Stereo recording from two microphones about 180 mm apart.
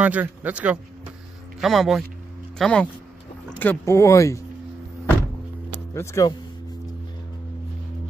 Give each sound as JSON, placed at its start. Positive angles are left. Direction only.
{"t": 0.0, "sound": "a man's voice", "side_deg": -10}
{"t": 5.9, "sound": "speech", "side_deg": 15}